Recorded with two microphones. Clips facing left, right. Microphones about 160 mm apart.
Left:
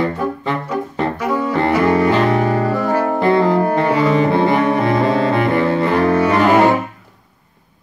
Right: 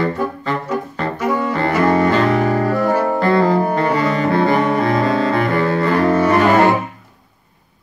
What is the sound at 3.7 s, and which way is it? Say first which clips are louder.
Bowed string instrument: left 2 dB; 20° left (ahead or behind).